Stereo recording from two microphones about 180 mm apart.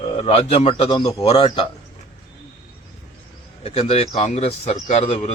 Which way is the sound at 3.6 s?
35° left (ahead or behind).